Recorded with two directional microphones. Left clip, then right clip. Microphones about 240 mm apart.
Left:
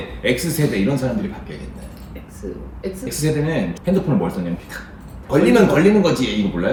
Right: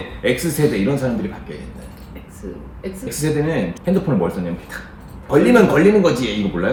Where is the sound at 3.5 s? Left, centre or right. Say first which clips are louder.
Right 1 dB; centre.